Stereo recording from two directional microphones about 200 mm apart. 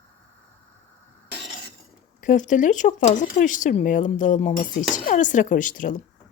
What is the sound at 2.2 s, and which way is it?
Speech, 40° left (ahead or behind).